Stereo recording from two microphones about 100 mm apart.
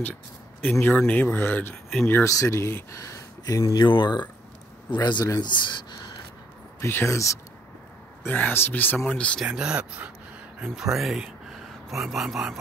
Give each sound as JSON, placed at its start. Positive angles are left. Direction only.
{"t": 0.0, "sound": "speech", "side_deg": 15}
{"t": 3.7, "sound": "speech", "side_deg": 50}
{"t": 6.8, "sound": "speech", "side_deg": 25}
{"t": 8.3, "sound": "speech", "side_deg": 15}
{"t": 8.9, "sound": "speech", "side_deg": 10}
{"t": 9.4, "sound": "speech", "side_deg": -10}